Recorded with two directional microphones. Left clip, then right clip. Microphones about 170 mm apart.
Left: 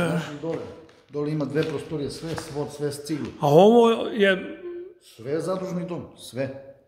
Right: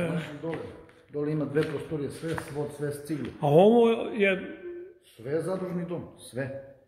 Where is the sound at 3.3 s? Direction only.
20° left (ahead or behind).